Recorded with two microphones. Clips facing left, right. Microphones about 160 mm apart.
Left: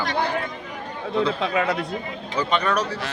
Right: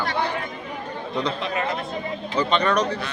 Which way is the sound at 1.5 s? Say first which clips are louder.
Left 3 dB; 90° left.